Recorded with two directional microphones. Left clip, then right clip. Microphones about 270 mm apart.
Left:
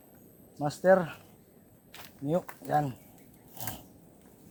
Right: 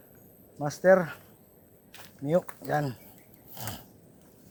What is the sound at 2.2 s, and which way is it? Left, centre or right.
Speech, right.